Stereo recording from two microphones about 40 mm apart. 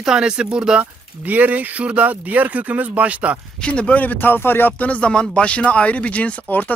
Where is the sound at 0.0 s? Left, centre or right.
Centre.